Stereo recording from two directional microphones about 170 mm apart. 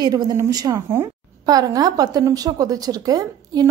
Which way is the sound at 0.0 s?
20° right (ahead or behind).